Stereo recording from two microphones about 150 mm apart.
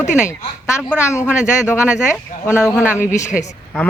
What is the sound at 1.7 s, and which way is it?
Speech, 10° right (ahead or behind).